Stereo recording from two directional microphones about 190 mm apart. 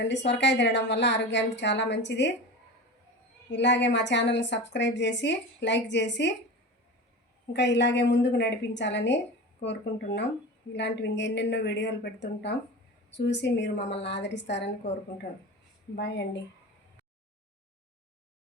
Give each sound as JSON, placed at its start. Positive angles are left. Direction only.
{"t": 0.0, "sound": "a woman's voice", "side_deg": 65}
{"t": 3.5, "sound": "a woman's voice", "side_deg": 65}
{"t": 7.5, "sound": "a woman's voice", "side_deg": 65}
{"t": 16.0, "sound": "a woman's voice", "side_deg": 60}